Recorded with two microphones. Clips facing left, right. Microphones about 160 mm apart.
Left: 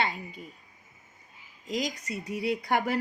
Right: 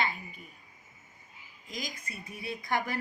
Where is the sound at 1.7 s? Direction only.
80° left.